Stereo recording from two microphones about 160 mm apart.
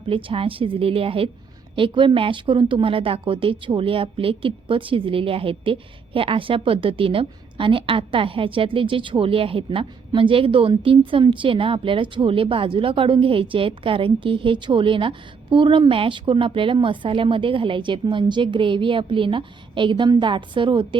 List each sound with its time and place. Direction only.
0.0 s a woman's voice: 35° right (ahead or behind)